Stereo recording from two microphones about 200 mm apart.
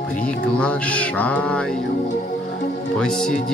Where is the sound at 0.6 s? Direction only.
5° left (ahead or behind).